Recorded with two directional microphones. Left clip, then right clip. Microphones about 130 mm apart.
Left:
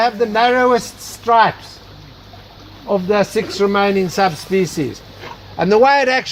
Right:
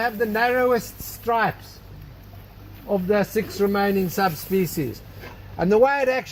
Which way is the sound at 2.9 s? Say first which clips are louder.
Left 6 dB; 15° left (ahead or behind).